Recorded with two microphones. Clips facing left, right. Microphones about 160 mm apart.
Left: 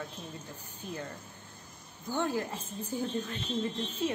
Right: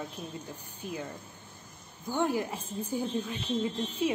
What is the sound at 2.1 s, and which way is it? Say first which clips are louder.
A woman's voice: right 2 dB; 15° right (ahead or behind).